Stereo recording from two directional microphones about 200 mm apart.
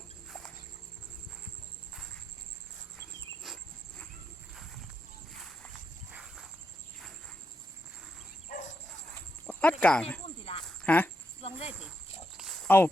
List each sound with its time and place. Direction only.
0.3 s a sound: centre (ahead or behind)
3.4 s cricket: centre (ahead or behind)
4.5 s horse: centre (ahead or behind)
6.1 s a sound: centre (ahead or behind)
8.4 s dog: 35° left (ahead or behind)
9.5 s speech: 5° left (ahead or behind)
10.2 s cricket: 25° left (ahead or behind)
10.8 s speech: 10° left (ahead or behind)
11.3 s cricket: 30° left (ahead or behind)
12.6 s speech: 10° left (ahead or behind)